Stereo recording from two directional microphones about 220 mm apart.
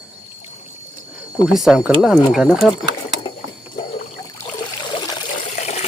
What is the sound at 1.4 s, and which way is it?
Speech, centre (ahead or behind).